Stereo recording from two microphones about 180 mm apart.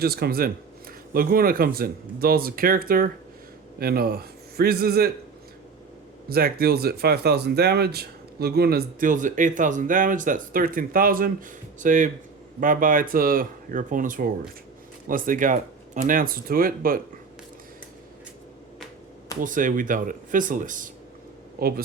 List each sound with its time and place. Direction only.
0.0 s a man's voice: 60° right (ahead or behind)
6.2 s speech: 60° right (ahead or behind)
19.4 s speech: 50° right (ahead or behind)
21.6 s speech: 55° right (ahead or behind)